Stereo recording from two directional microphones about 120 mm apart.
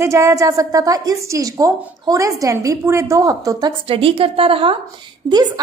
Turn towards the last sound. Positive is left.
turn(degrees=-35)  # may be behind; listen again after turning